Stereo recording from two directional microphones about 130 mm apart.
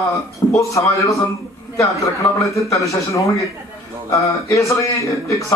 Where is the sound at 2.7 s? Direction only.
25° left (ahead or behind).